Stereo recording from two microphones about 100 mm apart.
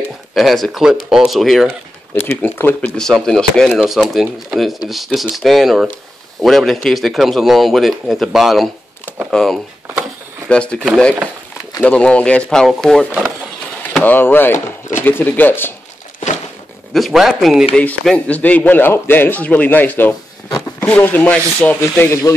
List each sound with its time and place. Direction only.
0.3 s speech: centre (ahead or behind)
2.1 s speech: 20° left (ahead or behind)
3.0 s a man's voice: 5° left (ahead or behind)
11.8 s a man's voice: 10° left (ahead or behind)
14.0 s speech: 20° left (ahead or behind)
16.9 s a man's voice: centre (ahead or behind); by 22.1 s 15° left (ahead or behind)